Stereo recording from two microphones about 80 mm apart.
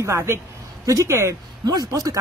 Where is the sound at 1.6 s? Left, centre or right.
Right.